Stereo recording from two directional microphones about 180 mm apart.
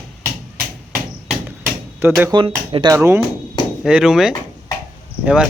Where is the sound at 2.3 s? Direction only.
25° right (ahead or behind).